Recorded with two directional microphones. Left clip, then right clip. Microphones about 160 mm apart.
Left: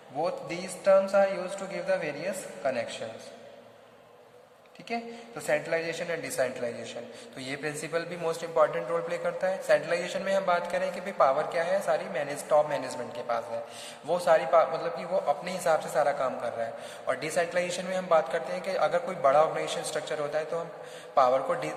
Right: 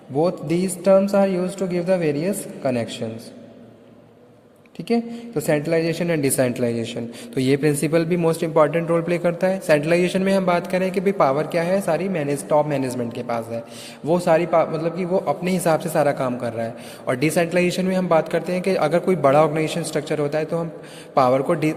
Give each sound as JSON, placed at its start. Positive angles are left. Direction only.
{"t": 0.2, "sound": "a man's voice", "side_deg": -50}
{"t": 5.5, "sound": "a man's voice", "side_deg": -60}